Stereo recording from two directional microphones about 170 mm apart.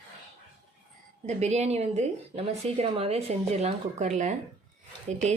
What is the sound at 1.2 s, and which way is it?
A woman's voice, 40° right (ahead or behind).